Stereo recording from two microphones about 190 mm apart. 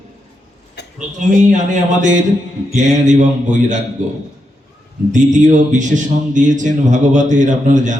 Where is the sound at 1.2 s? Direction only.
40° right (ahead or behind).